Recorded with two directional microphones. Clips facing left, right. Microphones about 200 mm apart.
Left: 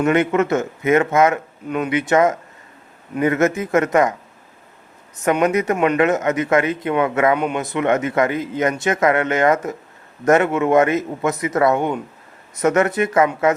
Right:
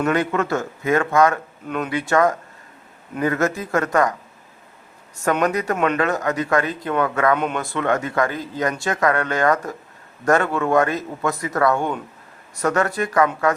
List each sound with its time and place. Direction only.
0.1 s a man's voice: 20° left (ahead or behind)
1.6 s speech: 5° left (ahead or behind)
1.9 s a man's voice: 20° left (ahead or behind)
5.4 s a man's voice: 20° left (ahead or behind)
5.7 s speech: 10° left (ahead or behind)
6.0 s a man's voice: 20° left (ahead or behind)
7.3 s speech: 10° left (ahead or behind)
7.6 s a man's voice: 20° left (ahead or behind)